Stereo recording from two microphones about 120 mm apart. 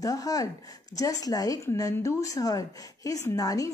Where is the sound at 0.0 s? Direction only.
30° left (ahead or behind).